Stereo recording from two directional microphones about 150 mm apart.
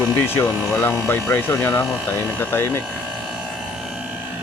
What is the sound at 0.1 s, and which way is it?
Speech, 15° left (ahead or behind).